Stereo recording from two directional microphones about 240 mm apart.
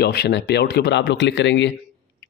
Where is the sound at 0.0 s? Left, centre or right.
Left.